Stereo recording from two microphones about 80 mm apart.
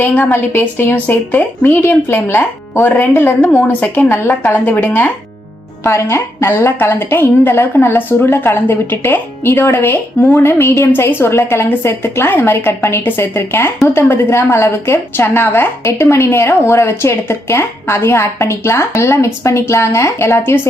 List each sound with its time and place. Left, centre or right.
0.2 s a woman's voice: left
3.6 s a woman's voice: left